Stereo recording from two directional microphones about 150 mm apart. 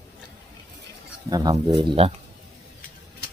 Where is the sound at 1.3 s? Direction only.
25° right (ahead or behind).